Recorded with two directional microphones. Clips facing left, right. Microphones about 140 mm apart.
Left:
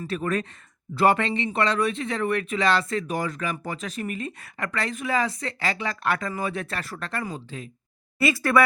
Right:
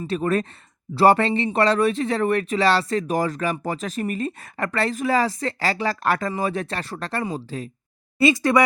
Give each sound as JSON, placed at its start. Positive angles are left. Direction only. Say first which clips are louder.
{"t": 0.0, "sound": "speech", "louder": "right 4 dB", "side_deg": -30}
{"t": 8.2, "sound": "speech", "louder": "right 3 dB", "side_deg": -20}